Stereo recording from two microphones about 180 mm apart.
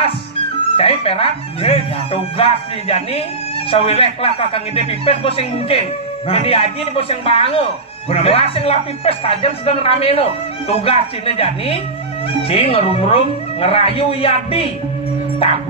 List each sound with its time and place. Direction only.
0.7 s speech: 35° left (ahead or behind)